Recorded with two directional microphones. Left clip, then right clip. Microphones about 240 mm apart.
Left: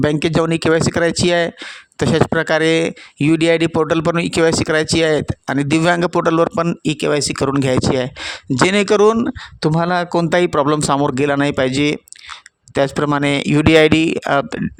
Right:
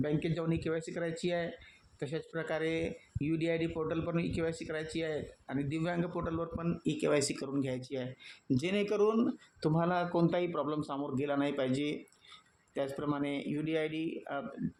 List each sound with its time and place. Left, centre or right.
0.0 s speech: left